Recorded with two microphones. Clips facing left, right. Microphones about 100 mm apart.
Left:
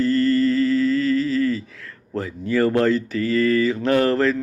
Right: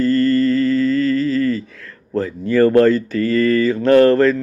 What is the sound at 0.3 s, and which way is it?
Mantra, 15° left (ahead or behind).